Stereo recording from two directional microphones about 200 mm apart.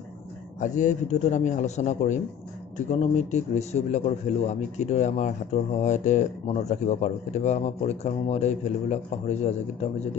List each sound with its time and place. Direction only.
0.6 s a man's voice: 40° left (ahead or behind)